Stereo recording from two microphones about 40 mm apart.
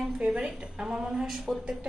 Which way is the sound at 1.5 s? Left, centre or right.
Centre.